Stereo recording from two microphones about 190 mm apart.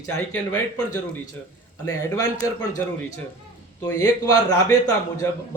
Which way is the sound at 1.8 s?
20° left (ahead or behind).